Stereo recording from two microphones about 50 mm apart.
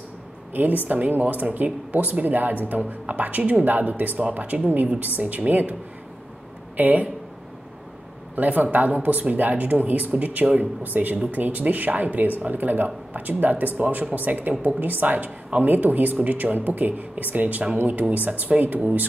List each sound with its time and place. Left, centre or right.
0.5 s speech: right
6.8 s speech: right
8.4 s speech: right